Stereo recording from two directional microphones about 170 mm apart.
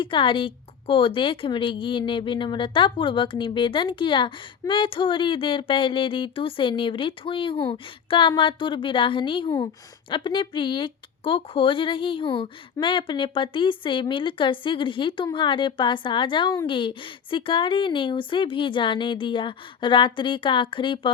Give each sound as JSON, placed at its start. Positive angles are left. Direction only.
{"t": 0.0, "sound": "speech", "side_deg": 30}